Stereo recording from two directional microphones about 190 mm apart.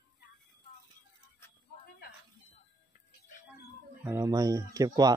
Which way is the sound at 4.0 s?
15° right (ahead or behind).